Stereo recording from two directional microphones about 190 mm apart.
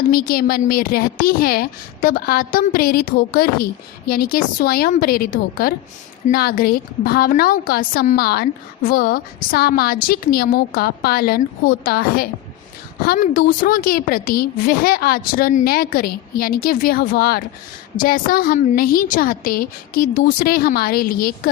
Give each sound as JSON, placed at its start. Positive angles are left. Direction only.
{"t": 0.1, "sound": "a woman's voice", "side_deg": 50}